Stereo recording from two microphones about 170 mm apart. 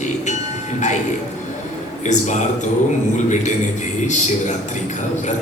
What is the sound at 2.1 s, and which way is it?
Speech, 45° left (ahead or behind).